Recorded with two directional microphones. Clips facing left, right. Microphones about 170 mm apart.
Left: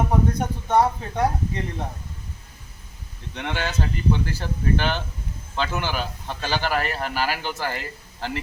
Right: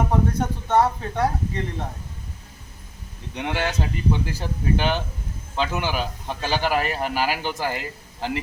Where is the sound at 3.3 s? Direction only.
10° right (ahead or behind).